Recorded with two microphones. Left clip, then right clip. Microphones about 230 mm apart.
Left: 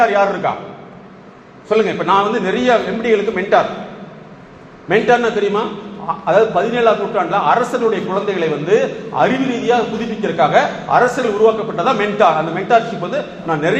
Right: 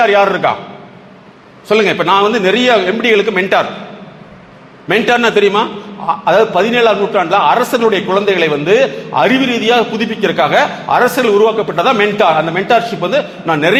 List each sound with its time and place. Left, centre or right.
0.0 s a man's voice: right
1.7 s a man's voice: right
4.9 s a man's voice: right